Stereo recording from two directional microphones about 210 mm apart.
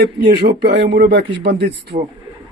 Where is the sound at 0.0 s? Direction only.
55° right (ahead or behind).